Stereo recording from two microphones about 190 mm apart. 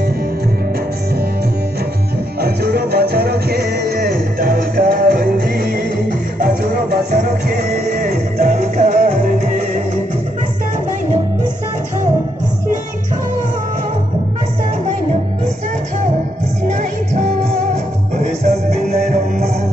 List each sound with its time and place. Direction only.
2.4 s music: 55° right (ahead or behind)
18.1 s music: 35° right (ahead or behind)